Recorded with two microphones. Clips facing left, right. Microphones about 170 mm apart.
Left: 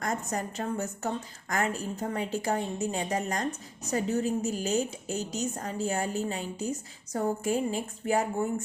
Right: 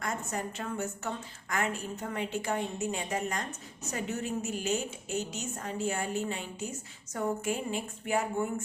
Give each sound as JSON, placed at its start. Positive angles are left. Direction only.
{"t": 0.0, "sound": "a woman's voice", "side_deg": 40}